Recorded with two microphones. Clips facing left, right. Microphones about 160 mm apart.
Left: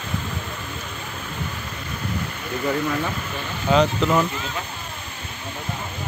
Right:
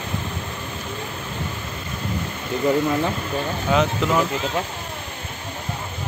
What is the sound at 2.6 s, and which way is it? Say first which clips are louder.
Speech: right 4 dB; 20° right (ahead or behind).